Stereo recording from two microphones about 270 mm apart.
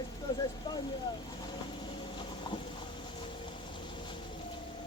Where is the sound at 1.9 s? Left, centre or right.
Centre.